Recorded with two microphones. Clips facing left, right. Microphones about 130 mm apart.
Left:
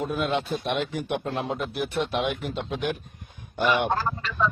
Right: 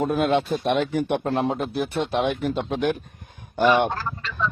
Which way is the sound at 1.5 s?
30° right (ahead or behind).